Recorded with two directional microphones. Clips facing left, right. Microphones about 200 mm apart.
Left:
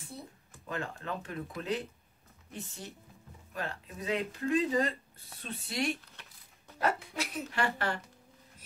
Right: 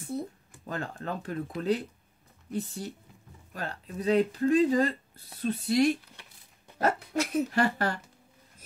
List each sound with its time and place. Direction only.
0.7 s speech: 40° right (ahead or behind)